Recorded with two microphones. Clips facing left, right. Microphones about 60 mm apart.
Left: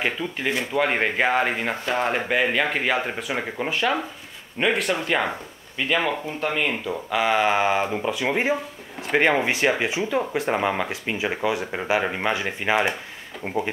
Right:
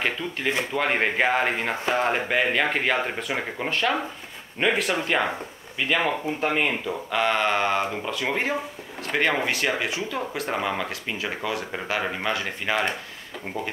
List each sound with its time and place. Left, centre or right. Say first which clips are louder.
0.7 s speech: left 2 dB; centre